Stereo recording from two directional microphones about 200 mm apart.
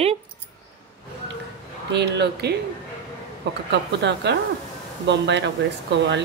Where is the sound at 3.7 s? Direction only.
60° right (ahead or behind).